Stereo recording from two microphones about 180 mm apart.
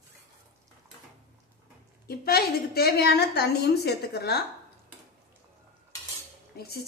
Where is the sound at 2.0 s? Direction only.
60° left (ahead or behind).